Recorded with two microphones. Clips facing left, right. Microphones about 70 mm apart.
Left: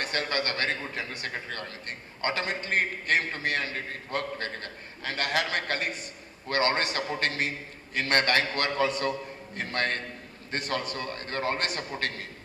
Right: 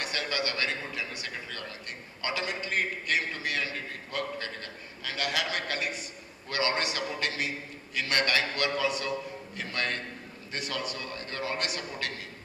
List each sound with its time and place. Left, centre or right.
0.0 s a man's voice: left